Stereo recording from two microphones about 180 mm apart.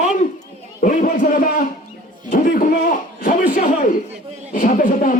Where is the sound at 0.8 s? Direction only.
50° left (ahead or behind).